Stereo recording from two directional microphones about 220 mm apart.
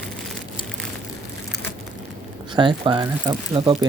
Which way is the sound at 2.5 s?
20° right (ahead or behind).